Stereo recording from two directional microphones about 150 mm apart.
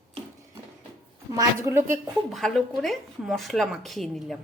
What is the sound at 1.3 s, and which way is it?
Speech, 20° right (ahead or behind).